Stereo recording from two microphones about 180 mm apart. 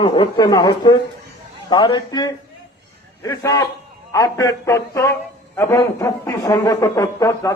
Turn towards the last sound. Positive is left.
turn(degrees=15)  # may be behind; listen again after turning